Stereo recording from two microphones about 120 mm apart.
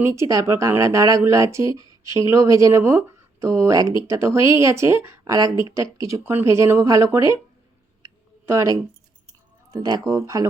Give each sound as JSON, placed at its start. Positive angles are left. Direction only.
{"t": 0.0, "sound": "speech", "side_deg": -25}
{"t": 8.0, "sound": "a sound", "side_deg": -25}
{"t": 9.7, "sound": "speech", "side_deg": -30}